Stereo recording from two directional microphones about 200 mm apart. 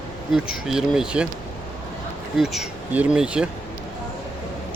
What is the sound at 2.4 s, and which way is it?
Speech, 5° right (ahead or behind).